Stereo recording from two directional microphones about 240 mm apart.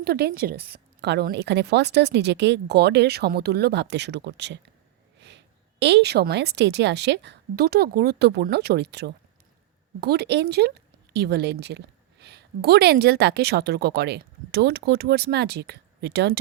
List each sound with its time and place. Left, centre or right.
0.0 s a woman's voice: right
5.8 s a woman's voice: right